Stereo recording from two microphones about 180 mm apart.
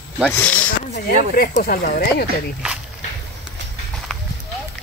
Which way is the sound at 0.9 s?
45° left (ahead or behind).